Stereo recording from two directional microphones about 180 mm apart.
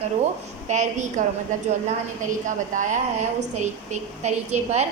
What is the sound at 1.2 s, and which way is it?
Speech, 45° right (ahead or behind).